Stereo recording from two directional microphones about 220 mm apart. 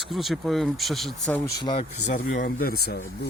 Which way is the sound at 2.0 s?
35° left (ahead or behind).